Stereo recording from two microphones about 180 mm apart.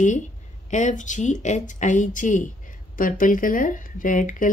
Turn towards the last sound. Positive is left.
turn(degrees=45)  # may be behind; listen again after turning